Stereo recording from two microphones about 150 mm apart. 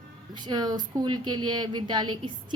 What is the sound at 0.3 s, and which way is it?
A woman's voice, 30° right (ahead or behind).